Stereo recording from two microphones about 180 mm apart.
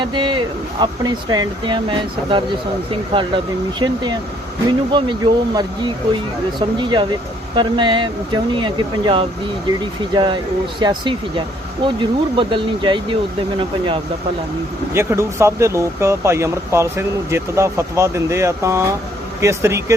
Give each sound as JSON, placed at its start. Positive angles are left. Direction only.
{"t": 0.0, "sound": "speech", "side_deg": -25}
{"t": 4.9, "sound": "speech", "side_deg": -25}
{"t": 14.9, "sound": "speech", "side_deg": -15}